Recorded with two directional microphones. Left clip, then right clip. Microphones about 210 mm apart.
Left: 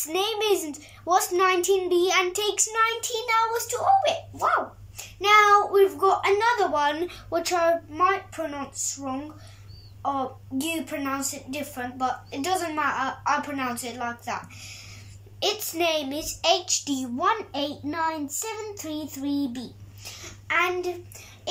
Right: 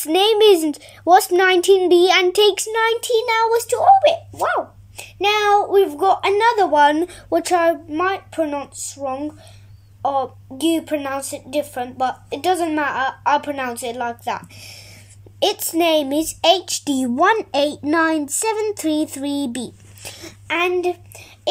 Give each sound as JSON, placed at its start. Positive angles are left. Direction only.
{"t": 0.0, "sound": "a child's voice", "side_deg": -45}